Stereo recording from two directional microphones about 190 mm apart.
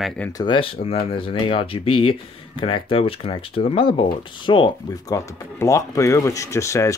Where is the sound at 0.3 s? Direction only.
20° left (ahead or behind).